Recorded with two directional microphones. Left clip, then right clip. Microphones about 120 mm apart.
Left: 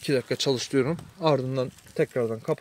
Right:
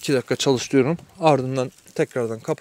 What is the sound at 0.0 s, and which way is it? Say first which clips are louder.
Speech: right 4 dB; 45° right (ahead or behind).